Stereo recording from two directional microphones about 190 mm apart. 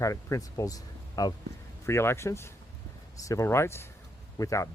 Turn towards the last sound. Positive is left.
turn(degrees=15)  # may be behind; listen again after turning